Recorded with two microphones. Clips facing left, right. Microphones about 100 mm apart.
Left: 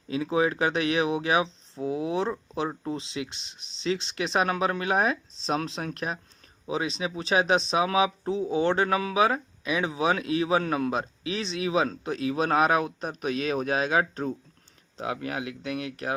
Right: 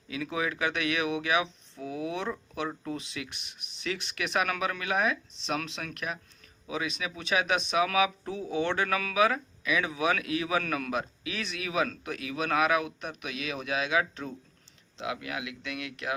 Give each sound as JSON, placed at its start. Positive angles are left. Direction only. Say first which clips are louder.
{"t": 0.1, "sound": "speech", "louder": "left 7 dB", "side_deg": 30}